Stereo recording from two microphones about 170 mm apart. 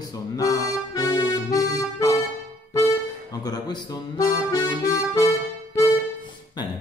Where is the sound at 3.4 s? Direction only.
25° left (ahead or behind).